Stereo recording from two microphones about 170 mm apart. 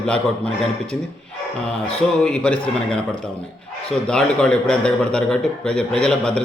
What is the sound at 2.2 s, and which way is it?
A man's voice, 5° left (ahead or behind).